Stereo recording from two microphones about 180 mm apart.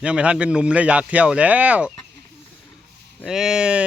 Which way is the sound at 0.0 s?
5° right (ahead or behind).